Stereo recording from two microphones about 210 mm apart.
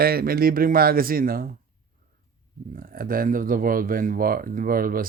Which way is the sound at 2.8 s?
40° right (ahead or behind).